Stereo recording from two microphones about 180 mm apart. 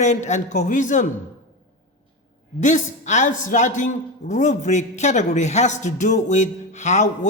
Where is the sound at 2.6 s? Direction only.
45° left (ahead or behind).